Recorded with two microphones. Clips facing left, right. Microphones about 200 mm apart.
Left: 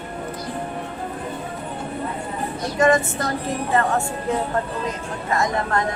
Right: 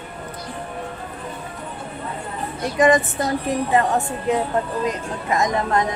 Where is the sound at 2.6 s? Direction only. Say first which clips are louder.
Right 2 dB; 15° right (ahead or behind).